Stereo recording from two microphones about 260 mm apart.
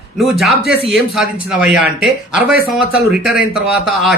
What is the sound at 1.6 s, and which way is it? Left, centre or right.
Speech, centre.